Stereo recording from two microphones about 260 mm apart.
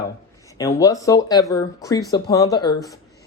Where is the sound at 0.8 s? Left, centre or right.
Centre.